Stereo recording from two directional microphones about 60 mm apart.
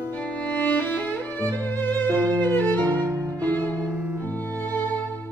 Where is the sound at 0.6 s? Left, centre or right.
Left.